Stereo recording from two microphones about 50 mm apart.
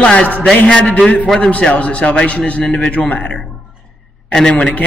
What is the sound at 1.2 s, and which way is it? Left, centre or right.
Speech, centre.